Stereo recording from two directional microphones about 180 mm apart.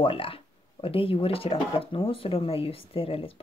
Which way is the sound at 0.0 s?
30° left (ahead or behind).